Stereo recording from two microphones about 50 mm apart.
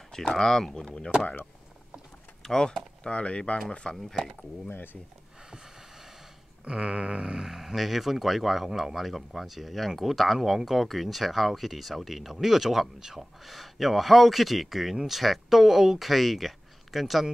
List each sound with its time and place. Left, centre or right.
0.1 s speech: centre
2.4 s speech: centre
3.9 s speech: centre
4.6 s speech: left
6.6 s speech: right; by 17.3 s centre